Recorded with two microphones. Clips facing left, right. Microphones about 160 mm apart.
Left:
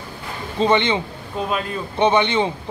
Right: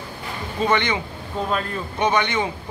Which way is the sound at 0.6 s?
25° left (ahead or behind).